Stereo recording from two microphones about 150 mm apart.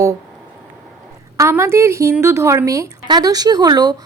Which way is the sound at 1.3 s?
20° right (ahead or behind).